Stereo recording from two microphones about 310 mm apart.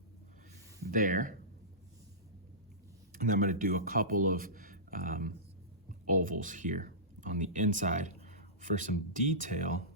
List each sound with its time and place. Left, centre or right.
0.9 s speech: right
3.1 s speech: right